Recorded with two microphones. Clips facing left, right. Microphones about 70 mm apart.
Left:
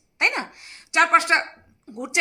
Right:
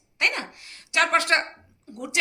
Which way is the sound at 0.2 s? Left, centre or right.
Left.